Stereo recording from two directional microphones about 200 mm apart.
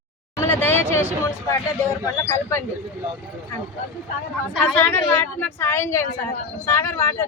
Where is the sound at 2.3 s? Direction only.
15° left (ahead or behind).